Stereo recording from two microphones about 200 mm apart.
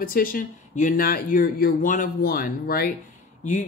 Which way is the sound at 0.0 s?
45° left (ahead or behind).